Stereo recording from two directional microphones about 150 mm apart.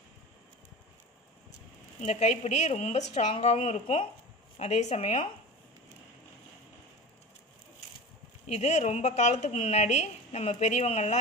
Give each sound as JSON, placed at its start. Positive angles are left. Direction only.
{"t": 2.0, "sound": "a woman's voice", "side_deg": 50}
{"t": 8.5, "sound": "a woman's voice", "side_deg": 50}